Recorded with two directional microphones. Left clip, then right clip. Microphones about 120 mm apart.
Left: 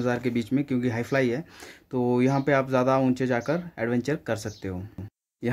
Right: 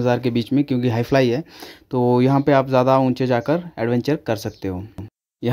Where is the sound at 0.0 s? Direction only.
55° right (ahead or behind).